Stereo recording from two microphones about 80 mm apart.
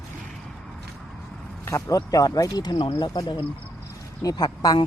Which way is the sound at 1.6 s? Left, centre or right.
Left.